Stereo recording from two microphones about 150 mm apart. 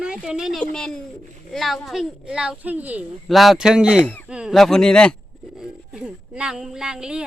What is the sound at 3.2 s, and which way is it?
Speech, centre (ahead or behind).